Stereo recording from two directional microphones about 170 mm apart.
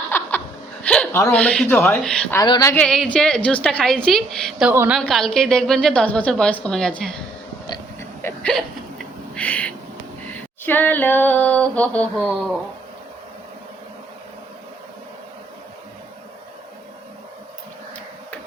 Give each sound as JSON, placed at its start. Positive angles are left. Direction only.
{"t": 0.1, "sound": "chuckle", "side_deg": 10}
{"t": 2.4, "sound": "speech", "side_deg": 20}
{"t": 2.8, "sound": "a woman's voice", "side_deg": 5}
{"t": 4.7, "sound": "a woman's voice", "side_deg": -15}
{"t": 4.9, "sound": "a woman's voice", "side_deg": 0}
{"t": 8.2, "sound": "a sound", "side_deg": 5}
{"t": 9.3, "sound": "owl", "side_deg": 5}
{"t": 10.2, "sound": "a sound", "side_deg": 10}